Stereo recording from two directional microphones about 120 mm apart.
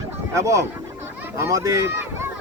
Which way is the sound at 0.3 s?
25° right (ahead or behind).